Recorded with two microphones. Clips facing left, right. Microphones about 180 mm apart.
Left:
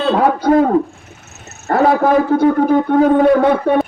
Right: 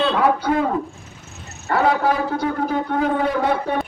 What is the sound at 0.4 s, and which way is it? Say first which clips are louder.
Speech: left 8 dB; 40° left (ahead or behind).